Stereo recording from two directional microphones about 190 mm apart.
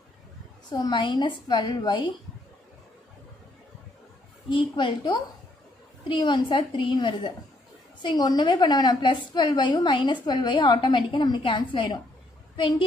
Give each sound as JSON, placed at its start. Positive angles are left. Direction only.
{"t": 0.7, "sound": "a woman's voice", "side_deg": 20}
{"t": 4.5, "sound": "a woman's voice", "side_deg": 25}